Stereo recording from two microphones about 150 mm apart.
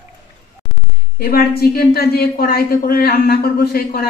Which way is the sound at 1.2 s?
90° left.